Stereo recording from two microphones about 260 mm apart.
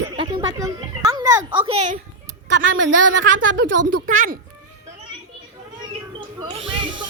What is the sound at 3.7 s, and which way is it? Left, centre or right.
Speech, right.